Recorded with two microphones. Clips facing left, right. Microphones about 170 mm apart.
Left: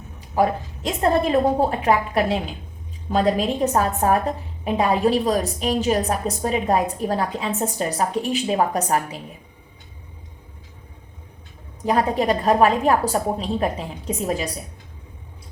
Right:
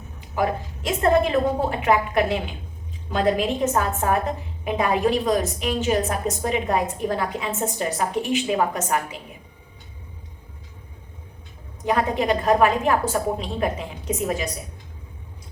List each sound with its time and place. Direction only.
0.2 s a sound: 35° left (ahead or behind)
1.3 s a woman's voice: 35° left (ahead or behind)
11.9 s a woman's voice: 35° left (ahead or behind)